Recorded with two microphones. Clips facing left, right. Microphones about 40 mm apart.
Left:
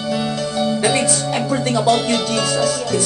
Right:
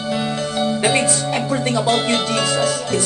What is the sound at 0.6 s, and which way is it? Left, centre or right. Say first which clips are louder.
Music: even; right.